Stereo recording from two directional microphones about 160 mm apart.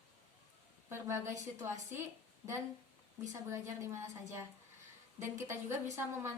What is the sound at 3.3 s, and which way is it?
Speech, 15° right (ahead or behind).